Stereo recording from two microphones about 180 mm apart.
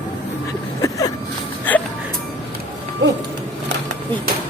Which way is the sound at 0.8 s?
20° left (ahead or behind).